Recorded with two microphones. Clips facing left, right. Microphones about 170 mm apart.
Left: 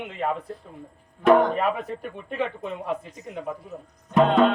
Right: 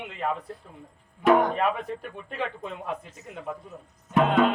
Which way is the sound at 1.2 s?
10° right (ahead or behind).